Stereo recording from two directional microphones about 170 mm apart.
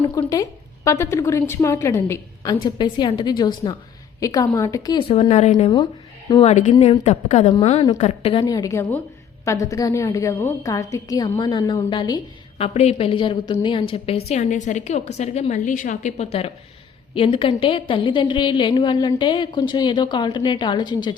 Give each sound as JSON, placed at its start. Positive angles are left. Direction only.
{"t": 0.2, "sound": "a woman's voice", "side_deg": 20}
{"t": 5.7, "sound": "speech", "side_deg": 25}
{"t": 6.5, "sound": "a woman's voice", "side_deg": 40}